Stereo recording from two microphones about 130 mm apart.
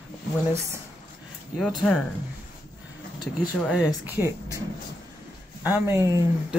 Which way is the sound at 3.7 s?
15° right (ahead or behind).